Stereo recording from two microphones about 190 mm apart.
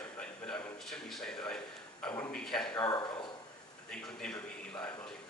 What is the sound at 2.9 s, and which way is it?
Speech, 20° left (ahead or behind).